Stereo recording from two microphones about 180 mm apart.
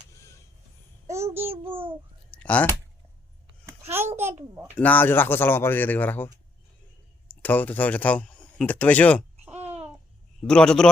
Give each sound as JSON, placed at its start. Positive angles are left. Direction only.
{"t": 0.1, "sound": "printer", "side_deg": 15}
{"t": 1.1, "sound": "child singing", "side_deg": -15}
{"t": 1.6, "sound": "babbling", "side_deg": -30}
{"t": 2.3, "sound": "a sound", "side_deg": 10}
{"t": 4.8, "sound": "speech", "side_deg": 10}
{"t": 7.4, "sound": "speech", "side_deg": 10}
{"t": 10.4, "sound": "a man's voice", "side_deg": 5}